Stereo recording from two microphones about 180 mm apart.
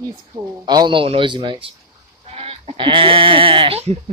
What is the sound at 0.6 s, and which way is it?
Speech, 25° right (ahead or behind).